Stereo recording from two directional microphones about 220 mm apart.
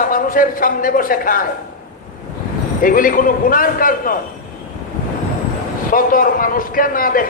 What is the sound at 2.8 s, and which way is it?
A man's voice, 40° left (ahead or behind).